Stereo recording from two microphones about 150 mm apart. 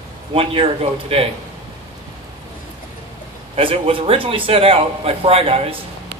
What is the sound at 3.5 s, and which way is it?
A man's voice, 40° right (ahead or behind).